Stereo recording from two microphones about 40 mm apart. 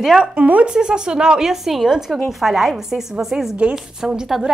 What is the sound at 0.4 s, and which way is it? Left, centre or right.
Speech, right.